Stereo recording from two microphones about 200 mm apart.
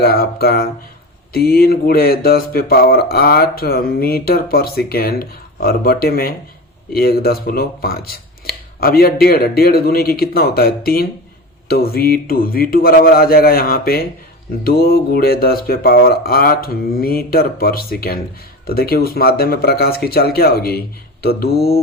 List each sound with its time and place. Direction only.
0.0 s speech: 50° left (ahead or behind)